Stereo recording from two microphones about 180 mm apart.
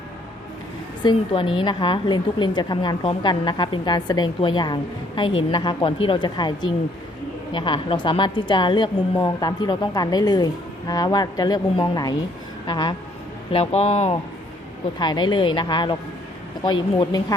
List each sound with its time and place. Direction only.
1.0 s a woman's voice: 25° left (ahead or behind)
14.9 s a woman's voice: 25° left (ahead or behind)
17.0 s a woman's voice: 20° left (ahead or behind)